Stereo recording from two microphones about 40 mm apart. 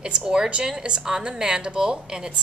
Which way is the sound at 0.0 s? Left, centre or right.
Right.